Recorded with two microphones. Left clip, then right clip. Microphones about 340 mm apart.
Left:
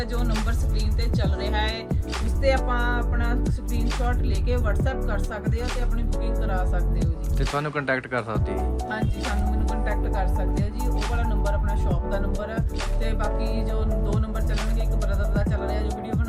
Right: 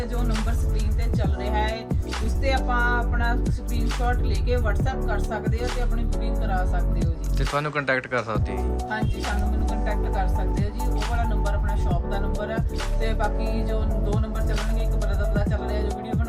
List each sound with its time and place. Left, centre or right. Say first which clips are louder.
1.1 s music: right 1 dB; centre
4.0 s speech: right 2 dB; centre
12.1 s speech: right 1 dB; centre
15.4 s speech: left 1 dB; centre